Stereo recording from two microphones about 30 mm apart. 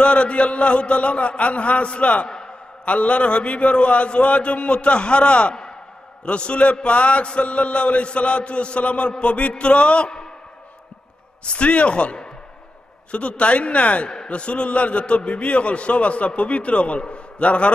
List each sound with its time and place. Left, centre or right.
0.0 s a man's voice: left
2.2 s a sound: left
2.8 s a man's voice: left
11.4 s a man's voice: left
14.0 s a sound: left
14.3 s a man's voice: left